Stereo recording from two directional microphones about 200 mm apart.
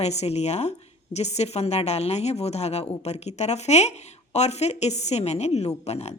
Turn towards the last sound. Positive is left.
turn(degrees=35)  # may be behind; listen again after turning